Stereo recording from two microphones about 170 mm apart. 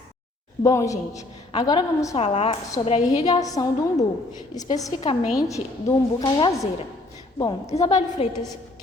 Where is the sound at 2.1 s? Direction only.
35° left (ahead or behind).